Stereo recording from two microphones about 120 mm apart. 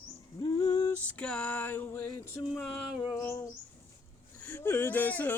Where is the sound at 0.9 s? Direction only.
10° left (ahead or behind).